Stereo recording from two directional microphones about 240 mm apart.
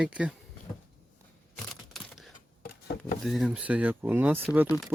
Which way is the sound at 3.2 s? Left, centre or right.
Centre.